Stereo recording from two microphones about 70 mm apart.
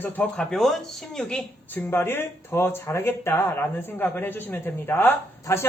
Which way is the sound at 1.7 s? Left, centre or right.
Left.